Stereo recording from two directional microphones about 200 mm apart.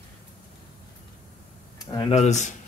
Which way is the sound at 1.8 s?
20° left (ahead or behind).